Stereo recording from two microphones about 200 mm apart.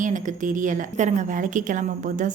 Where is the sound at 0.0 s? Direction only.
40° right (ahead or behind).